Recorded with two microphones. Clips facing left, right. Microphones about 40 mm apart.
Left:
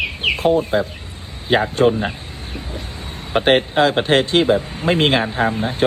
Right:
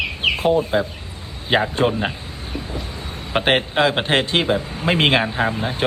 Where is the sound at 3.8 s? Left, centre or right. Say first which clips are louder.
Left 3 dB; right.